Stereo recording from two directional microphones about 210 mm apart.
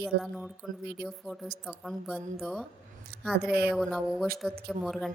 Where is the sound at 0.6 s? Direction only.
Centre (ahead or behind).